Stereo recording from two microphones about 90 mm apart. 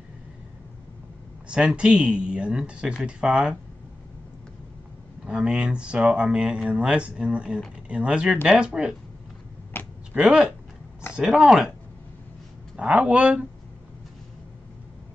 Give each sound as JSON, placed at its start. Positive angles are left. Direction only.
{"t": 1.5, "sound": "speech", "side_deg": -10}
{"t": 5.2, "sound": "speech", "side_deg": -10}
{"t": 9.7, "sound": "a sound", "side_deg": 25}
{"t": 10.2, "sound": "speech", "side_deg": -5}
{"t": 12.7, "sound": "speech", "side_deg": -15}